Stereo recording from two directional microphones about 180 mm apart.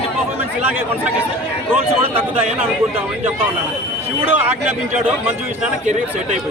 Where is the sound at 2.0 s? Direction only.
35° right (ahead or behind).